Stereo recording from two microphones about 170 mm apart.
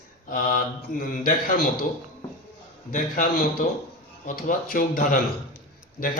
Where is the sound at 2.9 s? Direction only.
55° left (ahead or behind).